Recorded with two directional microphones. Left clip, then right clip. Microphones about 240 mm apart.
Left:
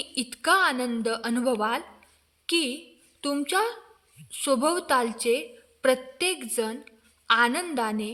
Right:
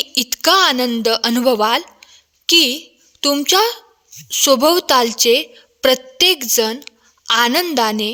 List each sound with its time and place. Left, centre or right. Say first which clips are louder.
0.0 s a woman's voice: right 12 dB; right